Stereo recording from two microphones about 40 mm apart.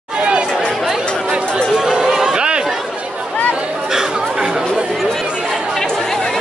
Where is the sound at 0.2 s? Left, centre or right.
Right.